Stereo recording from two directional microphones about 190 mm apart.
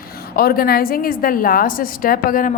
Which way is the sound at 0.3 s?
50° left (ahead or behind).